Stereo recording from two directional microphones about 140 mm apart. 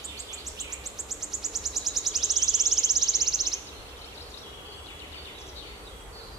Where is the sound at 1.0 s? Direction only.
Centre (ahead or behind).